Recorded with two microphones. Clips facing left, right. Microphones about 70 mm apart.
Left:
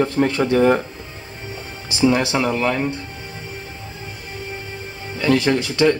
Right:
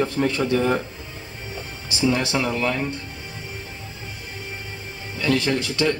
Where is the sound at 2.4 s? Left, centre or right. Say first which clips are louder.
Left 4 dB; left.